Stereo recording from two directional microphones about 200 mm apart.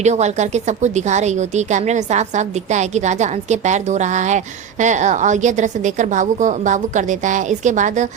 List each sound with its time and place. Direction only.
0.0 s a woman's voice: 35° right (ahead or behind)